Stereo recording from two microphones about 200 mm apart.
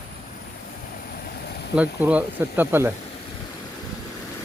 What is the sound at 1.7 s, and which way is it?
Speech, 5° right (ahead or behind).